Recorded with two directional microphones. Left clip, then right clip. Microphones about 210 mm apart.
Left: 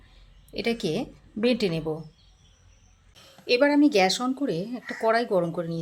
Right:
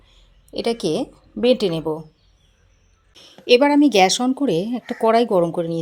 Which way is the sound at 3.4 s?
35° right (ahead or behind).